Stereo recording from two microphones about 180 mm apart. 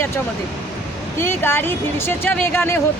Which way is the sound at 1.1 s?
15° left (ahead or behind).